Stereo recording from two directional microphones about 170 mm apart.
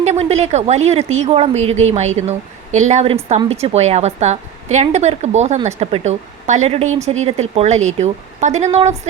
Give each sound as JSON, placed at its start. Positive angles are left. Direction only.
{"t": 0.0, "sound": "a woman's voice", "side_deg": -40}